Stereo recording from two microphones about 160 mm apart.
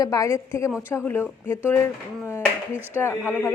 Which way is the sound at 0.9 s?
15° left (ahead or behind).